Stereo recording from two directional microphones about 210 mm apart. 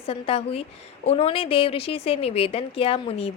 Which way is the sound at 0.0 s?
30° left (ahead or behind).